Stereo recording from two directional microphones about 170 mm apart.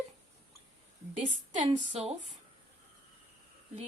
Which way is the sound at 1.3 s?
40° right (ahead or behind).